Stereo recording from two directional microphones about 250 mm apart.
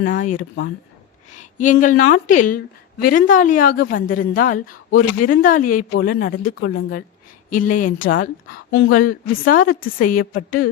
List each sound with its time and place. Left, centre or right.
0.0 s a woman's voice: left